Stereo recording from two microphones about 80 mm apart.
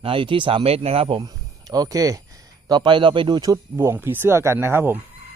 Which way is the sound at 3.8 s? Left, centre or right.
Right.